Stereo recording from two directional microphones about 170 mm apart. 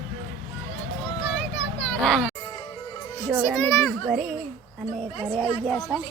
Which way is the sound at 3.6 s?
15° left (ahead or behind).